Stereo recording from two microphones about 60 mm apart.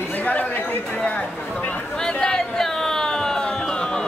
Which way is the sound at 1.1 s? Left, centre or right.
Left.